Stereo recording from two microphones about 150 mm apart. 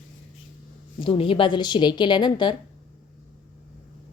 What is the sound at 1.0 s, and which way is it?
A woman's voice, 35° left (ahead or behind).